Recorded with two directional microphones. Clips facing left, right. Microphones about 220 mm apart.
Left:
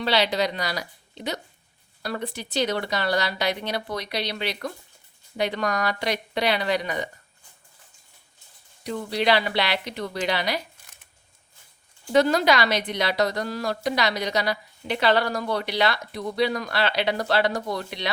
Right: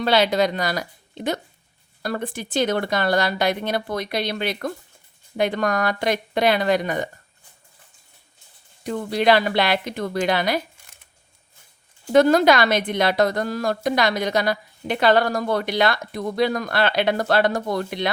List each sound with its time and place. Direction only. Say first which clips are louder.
0.0 s a woman's voice: right 4 dB; 50° right (ahead or behind)
8.8 s a woman's voice: right 4 dB; 50° right (ahead or behind)
12.1 s a woman's voice: right 5 dB; 50° right (ahead or behind)